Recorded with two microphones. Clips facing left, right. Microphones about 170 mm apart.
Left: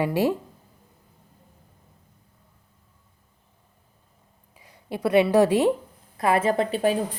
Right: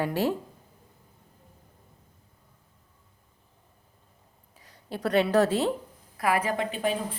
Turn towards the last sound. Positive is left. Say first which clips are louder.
# left 6 dB
turn(degrees=35)  # may be behind; listen again after turning